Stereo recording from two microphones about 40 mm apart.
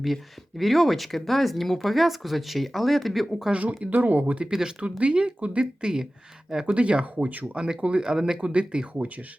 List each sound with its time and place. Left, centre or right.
0.0 s speech: centre
3.5 s speech: right
4.8 s speech: right
7.0 s speech: right
7.5 s speech: right
8.0 s speech: centre
8.4 s speech: right